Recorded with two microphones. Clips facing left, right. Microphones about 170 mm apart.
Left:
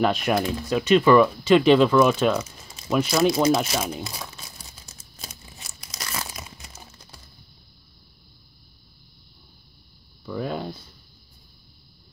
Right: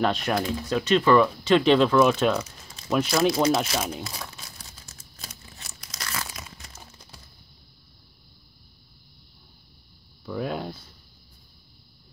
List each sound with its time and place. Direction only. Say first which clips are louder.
0.0 s speech: left 3 dB; 5° left (ahead or behind)
4.8 s crumpling: left 2 dB; 20° left (ahead or behind)
6.6 s crumpling: left 1 dB; 5° left (ahead or behind)
10.2 s a sound: left 1 dB; 5° right (ahead or behind)